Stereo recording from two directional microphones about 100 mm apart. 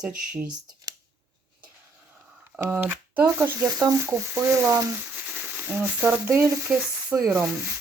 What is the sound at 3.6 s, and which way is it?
Speech, 35° right (ahead or behind).